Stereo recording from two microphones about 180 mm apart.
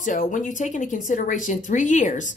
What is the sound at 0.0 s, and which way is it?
Speech, 45° left (ahead or behind).